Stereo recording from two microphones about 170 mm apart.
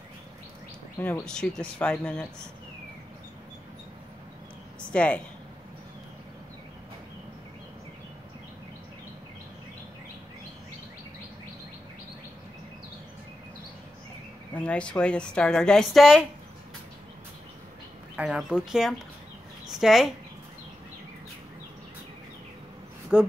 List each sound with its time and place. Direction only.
0.9 s speech: 15° left (ahead or behind)
1.2 s a woman's voice: 5° left (ahead or behind)
4.7 s a sound: 5° left (ahead or behind)
14.5 s a woman's voice: 5° left (ahead or behind)
18.1 s a woman's voice: 5° right (ahead or behind)
23.1 s a sound: 10° right (ahead or behind)